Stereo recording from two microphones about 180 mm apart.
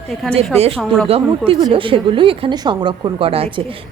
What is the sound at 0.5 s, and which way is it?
A woman's voice, 35° right (ahead or behind).